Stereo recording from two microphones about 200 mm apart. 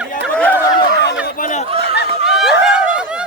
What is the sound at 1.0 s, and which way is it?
Chatter, 50° left (ahead or behind).